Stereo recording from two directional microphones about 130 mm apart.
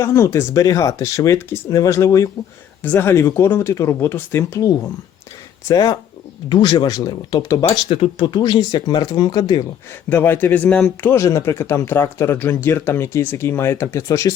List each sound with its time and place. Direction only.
0.0 s speech: 20° left (ahead or behind)
7.9 s speech: 50° left (ahead or behind)
8.3 s speech: 35° left (ahead or behind)
10.1 s a man's voice: 15° left (ahead or behind)